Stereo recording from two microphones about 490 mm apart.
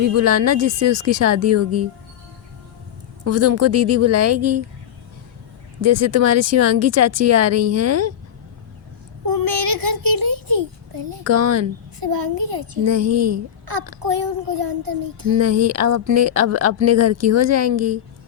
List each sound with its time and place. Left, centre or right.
0.0 s speech: right
3.2 s speech: right
5.8 s speech: right
9.5 s child singing: right
11.2 s speech: right
11.9 s speech: right
12.7 s speech: right
14.0 s speech: right
15.4 s speech: right